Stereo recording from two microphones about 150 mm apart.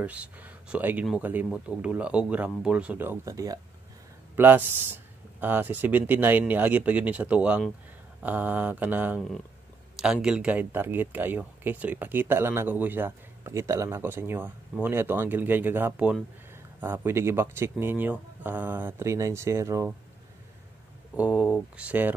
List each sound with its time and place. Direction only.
0.0 s speech: 10° right (ahead or behind)
21.2 s speech: 5° right (ahead or behind)